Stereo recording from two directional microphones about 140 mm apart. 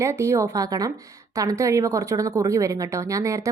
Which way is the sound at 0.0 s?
20° right (ahead or behind).